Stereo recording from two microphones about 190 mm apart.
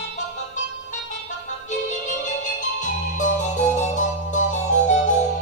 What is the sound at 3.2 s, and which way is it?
Music, 40° left (ahead or behind).